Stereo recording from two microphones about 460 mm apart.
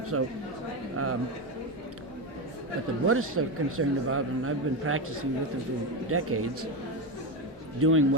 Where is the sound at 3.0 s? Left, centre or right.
Right.